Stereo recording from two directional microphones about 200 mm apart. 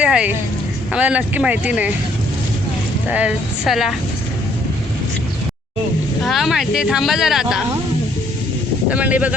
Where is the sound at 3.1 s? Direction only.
5° right (ahead or behind).